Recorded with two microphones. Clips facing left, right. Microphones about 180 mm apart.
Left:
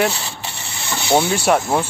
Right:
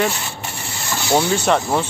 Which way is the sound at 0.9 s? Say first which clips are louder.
Left 1 dB; 20° left (ahead or behind).